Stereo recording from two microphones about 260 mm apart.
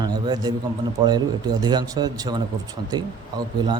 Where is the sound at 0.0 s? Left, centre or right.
Centre.